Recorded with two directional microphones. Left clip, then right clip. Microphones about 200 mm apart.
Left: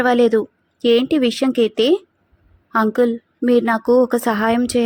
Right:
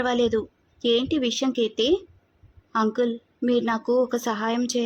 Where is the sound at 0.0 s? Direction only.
20° left (ahead or behind).